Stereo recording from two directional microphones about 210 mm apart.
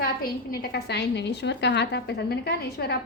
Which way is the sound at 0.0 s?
45° left (ahead or behind).